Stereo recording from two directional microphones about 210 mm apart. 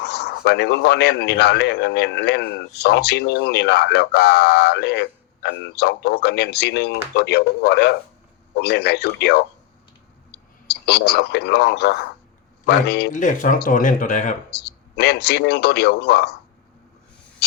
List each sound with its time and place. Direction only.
0.0 s speech: 50° left (ahead or behind)
10.7 s speech: 50° left (ahead or behind)
13.1 s speech: 35° left (ahead or behind)
14.5 s speech: 50° left (ahead or behind)